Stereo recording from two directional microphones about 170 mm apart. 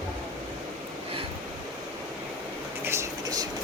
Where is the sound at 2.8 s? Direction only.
20° right (ahead or behind).